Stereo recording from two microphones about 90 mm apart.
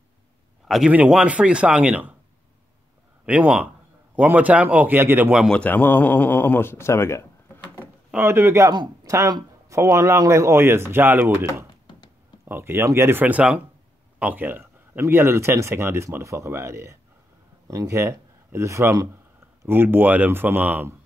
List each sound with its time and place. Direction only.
0.7 s speech: 5° right (ahead or behind)
0.9 s speech: 15° right (ahead or behind)
3.3 s a man's voice: 15° right (ahead or behind)
5.5 s speech: 15° left (ahead or behind)
8.2 s speech: 25° right (ahead or behind)
12.4 s speech: 25° right (ahead or behind)